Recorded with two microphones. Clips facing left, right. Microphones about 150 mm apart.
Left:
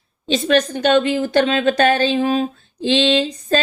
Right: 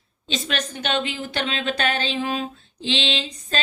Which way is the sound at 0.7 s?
45° left (ahead or behind).